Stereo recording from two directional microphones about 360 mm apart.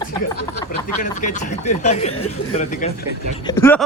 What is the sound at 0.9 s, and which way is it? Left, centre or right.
Speech, left.